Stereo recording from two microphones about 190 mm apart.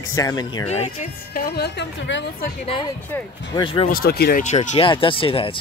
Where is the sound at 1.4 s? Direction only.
60° left (ahead or behind).